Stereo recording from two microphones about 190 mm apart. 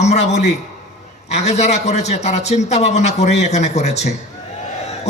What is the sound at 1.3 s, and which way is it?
A man's voice, 35° left (ahead or behind).